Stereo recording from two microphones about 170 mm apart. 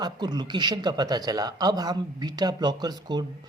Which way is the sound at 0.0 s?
25° right (ahead or behind).